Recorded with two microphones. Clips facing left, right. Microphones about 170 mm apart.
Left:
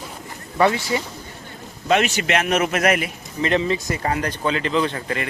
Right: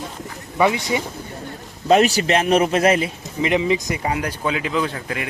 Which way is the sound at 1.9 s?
35° right (ahead or behind).